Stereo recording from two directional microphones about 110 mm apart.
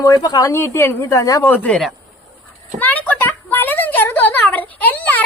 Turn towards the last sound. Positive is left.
turn(degrees=15)  # may be behind; listen again after turning